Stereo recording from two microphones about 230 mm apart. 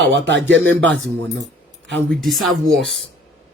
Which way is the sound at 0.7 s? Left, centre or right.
Centre.